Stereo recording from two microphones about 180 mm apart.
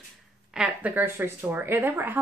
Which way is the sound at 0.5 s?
5° right (ahead or behind).